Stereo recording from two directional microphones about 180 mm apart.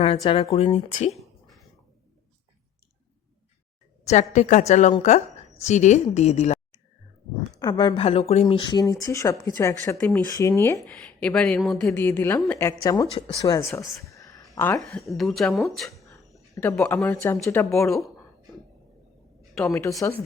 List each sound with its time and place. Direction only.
0.2 s a woman's voice: 30° left (ahead or behind)
1.1 s a sound: centre (ahead or behind)
4.0 s a woman's voice: 40° left (ahead or behind)
7.6 s speech: 20° left (ahead or behind)
10.9 s speech: 5° left (ahead or behind)
14.8 s speech: centre (ahead or behind)
19.6 s speech: centre (ahead or behind)
20.0 s speech: 15° left (ahead or behind)